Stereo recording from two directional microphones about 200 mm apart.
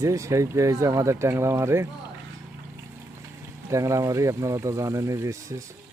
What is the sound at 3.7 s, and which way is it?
Speech, 15° right (ahead or behind).